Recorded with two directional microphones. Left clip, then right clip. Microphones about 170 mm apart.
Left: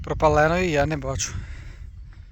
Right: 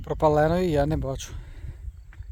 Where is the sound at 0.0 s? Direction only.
30° right (ahead or behind).